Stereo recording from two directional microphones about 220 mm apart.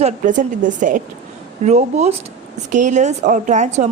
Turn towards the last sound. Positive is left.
turn(degrees=-30)  # may be behind; listen again after turning